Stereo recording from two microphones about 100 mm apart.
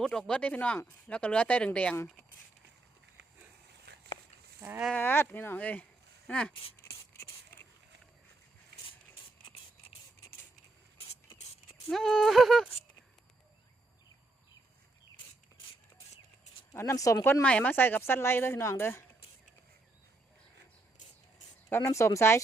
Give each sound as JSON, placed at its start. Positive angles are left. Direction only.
{"t": 0.0, "sound": "speech", "side_deg": 10}
{"t": 4.6, "sound": "speech", "side_deg": -25}
{"t": 4.9, "sound": "a woman's voice", "side_deg": 20}
{"t": 6.5, "sound": "speech", "side_deg": 65}
{"t": 7.1, "sound": "a sound", "side_deg": 25}
{"t": 11.9, "sound": "speech", "side_deg": 5}
{"t": 16.7, "sound": "speech", "side_deg": 30}
{"t": 17.4, "sound": "a woman's voice", "side_deg": 15}
{"t": 21.7, "sound": "a woman's voice", "side_deg": 25}